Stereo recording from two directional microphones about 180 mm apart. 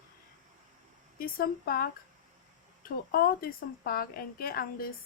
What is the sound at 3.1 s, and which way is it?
A woman's voice, 55° left (ahead or behind).